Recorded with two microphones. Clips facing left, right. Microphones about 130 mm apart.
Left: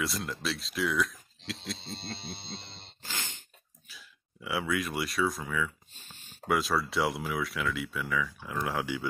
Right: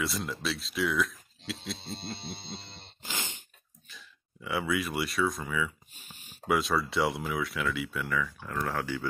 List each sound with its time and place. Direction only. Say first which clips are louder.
0.0 s speech: right 1 dB; centre (ahead or behind)
3.0 s a sound: right 2 dB; 15° right (ahead or behind)
3.9 s speech: right 1 dB; 5° left (ahead or behind)
5.9 s a sound: even; 15° right (ahead or behind)
6.5 s speech: right 1 dB; centre (ahead or behind)
8.5 s speech: even; 15° left (ahead or behind)